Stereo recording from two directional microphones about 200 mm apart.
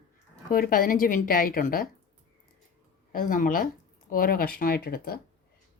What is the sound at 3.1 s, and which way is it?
Speech, 45° left (ahead or behind).